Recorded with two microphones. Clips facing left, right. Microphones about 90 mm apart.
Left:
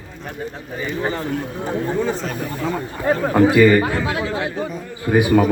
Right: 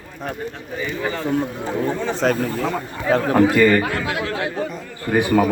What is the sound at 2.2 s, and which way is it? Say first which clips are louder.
Speech: right 8 dB; 75° right (ahead or behind).